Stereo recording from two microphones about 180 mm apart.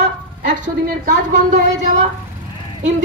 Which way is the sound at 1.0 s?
40° right (ahead or behind).